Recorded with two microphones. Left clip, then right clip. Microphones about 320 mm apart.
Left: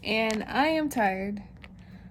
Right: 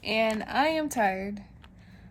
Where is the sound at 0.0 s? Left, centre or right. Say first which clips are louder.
Right 1 dB; centre.